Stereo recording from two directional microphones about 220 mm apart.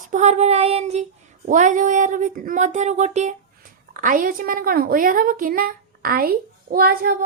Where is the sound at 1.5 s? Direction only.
35° right (ahead or behind).